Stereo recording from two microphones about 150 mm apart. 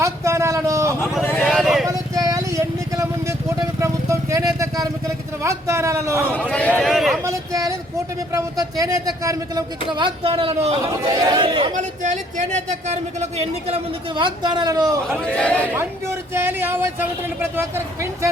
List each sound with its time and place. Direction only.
0.0 s a sound: 20° right (ahead or behind)
1.2 s a sound: 10° left (ahead or behind)
1.5 s vehicle: centre (ahead or behind)
1.9 s vehicle: 25° right (ahead or behind)
5.4 s a man's voice: 20° right (ahead or behind)
6.5 s a sound: 10° left (ahead or behind)
7.3 s a sound: 20° right (ahead or behind)
8.3 s a man's voice: 20° right (ahead or behind)
9.9 s speech: 35° right (ahead or behind)
11.1 s speech: 25° right (ahead or behind)
11.7 s a man's voice: 55° right (ahead or behind); by 14.9 s 25° right (ahead or behind)
15.1 s speech: 5° left (ahead or behind)
15.8 s speech: 15° right (ahead or behind)